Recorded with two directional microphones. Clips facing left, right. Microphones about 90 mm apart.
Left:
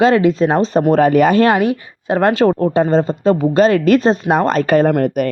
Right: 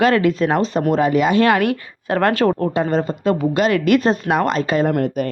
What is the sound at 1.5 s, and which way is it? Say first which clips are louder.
A woman's voice: left 2 dB; 20° left (ahead or behind).